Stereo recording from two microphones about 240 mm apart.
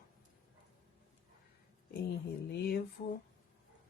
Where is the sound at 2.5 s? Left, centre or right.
Left.